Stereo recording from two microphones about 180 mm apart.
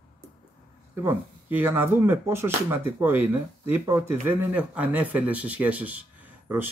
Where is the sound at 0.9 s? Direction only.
10° right (ahead or behind).